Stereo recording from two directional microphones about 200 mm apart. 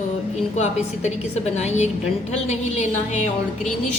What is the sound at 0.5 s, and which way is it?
A woman's voice, 35° left (ahead or behind).